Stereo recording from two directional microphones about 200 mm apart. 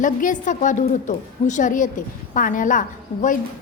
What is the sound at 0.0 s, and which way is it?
A woman's voice, 40° left (ahead or behind).